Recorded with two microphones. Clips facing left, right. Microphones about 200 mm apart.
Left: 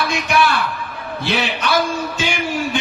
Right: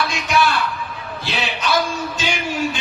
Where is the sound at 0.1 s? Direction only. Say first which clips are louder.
Left 2 dB; 55° left (ahead or behind).